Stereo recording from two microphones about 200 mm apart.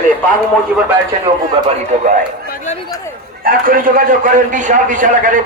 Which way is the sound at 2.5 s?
35° left (ahead or behind).